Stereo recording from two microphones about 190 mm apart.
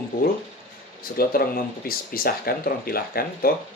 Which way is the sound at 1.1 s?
50° left (ahead or behind).